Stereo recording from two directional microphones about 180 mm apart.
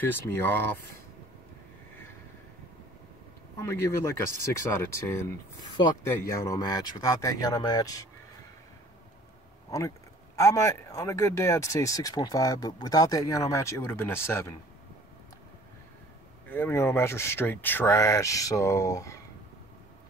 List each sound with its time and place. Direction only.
0.1 s speech: 10° left (ahead or behind)
3.5 s speech: 15° left (ahead or behind)
9.7 s speech: 20° left (ahead or behind)
16.4 s speech: 10° left (ahead or behind)